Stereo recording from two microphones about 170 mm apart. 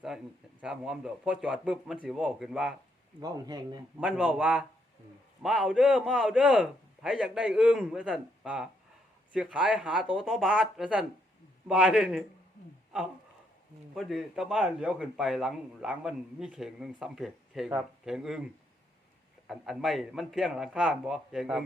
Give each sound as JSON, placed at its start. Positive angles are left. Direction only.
{"t": 0.6, "sound": "a man's voice", "side_deg": -5}
{"t": 3.2, "sound": "speech", "side_deg": -25}
{"t": 4.0, "sound": "a man's voice", "side_deg": -10}
{"t": 13.9, "sound": "a man's voice", "side_deg": 0}
{"t": 19.5, "sound": "a man's voice", "side_deg": 0}